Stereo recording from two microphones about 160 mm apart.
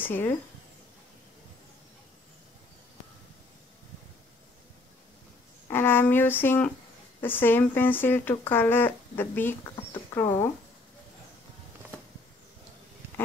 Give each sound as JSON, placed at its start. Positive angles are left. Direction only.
{"t": 0.0, "sound": "speech", "side_deg": 15}
{"t": 5.7, "sound": "speech", "side_deg": 15}